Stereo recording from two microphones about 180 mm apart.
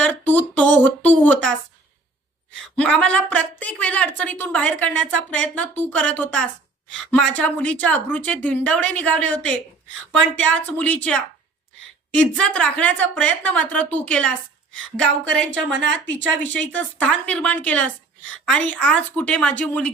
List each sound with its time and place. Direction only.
0.0 s speech: 10° left (ahead or behind)
2.7 s a woman's voice: 5° left (ahead or behind)
15.8 s a woman's voice: 90° right
16.4 s a woman's voice: 10° left (ahead or behind)